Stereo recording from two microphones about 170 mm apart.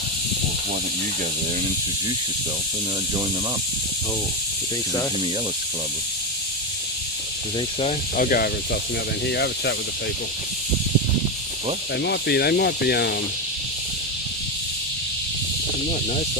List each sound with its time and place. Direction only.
8.1 s speech: 55° left (ahead or behind)
9.2 s speech: 85° left
12.0 s speech: 75° left (ahead or behind)